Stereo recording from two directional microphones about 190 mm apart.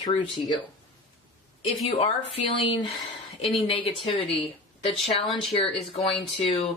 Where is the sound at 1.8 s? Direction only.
30° left (ahead or behind).